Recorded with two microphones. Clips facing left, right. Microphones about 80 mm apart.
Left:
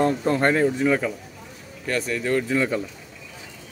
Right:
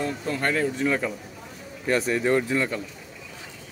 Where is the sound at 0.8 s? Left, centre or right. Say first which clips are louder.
Left 3 dB; centre.